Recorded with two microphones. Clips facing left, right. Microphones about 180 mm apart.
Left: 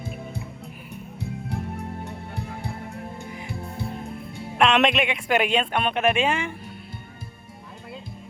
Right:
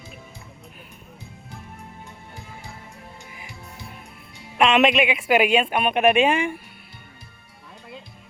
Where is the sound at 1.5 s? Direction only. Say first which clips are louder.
Left 8 dB; 70° left (ahead or behind).